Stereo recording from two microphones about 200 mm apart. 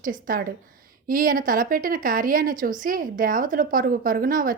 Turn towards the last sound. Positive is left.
turn(degrees=-45)  # may be behind; listen again after turning